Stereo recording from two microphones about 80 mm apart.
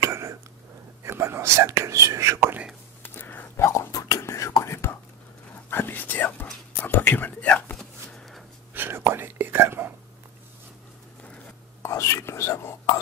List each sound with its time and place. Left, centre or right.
0.0 s a sound: right
1.0 s speech: right
3.0 s whispering: left
5.7 s speech: left
7.7 s a sound: centre
8.7 s whispering: right
11.8 s whispering: left